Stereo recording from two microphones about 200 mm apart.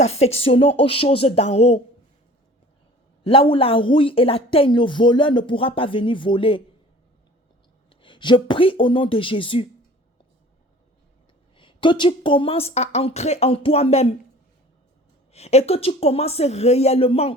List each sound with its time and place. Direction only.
0.0 s a woman's voice: 30° left (ahead or behind)
3.2 s speech: 25° left (ahead or behind)
8.0 s speech: 25° left (ahead or behind)
11.5 s speech: 25° left (ahead or behind)
15.3 s a woman's voice: 30° left (ahead or behind)